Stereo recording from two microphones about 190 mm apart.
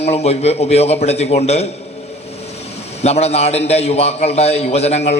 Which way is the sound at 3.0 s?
35° left (ahead or behind).